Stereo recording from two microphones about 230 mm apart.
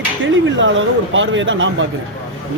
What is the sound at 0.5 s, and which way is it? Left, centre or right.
A man's voice, right.